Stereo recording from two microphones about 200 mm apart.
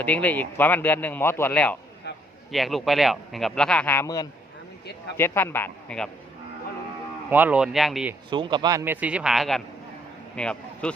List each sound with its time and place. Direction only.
0.0 s speech: 5° left (ahead or behind)
2.0 s a sound: 55° left (ahead or behind)
2.5 s speech: centre (ahead or behind)
7.3 s speech: 10° right (ahead or behind)
8.3 s speech: 25° right (ahead or behind)
8.8 s speech: 10° right (ahead or behind)